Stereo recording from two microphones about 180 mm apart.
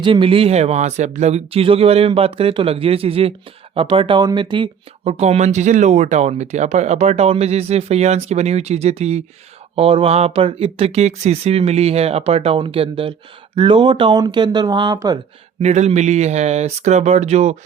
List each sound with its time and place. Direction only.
0.0 s speech: 30° right (ahead or behind)
15.6 s speech: 40° right (ahead or behind)